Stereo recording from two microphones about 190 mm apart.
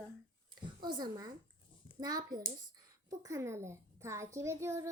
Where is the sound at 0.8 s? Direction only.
20° right (ahead or behind).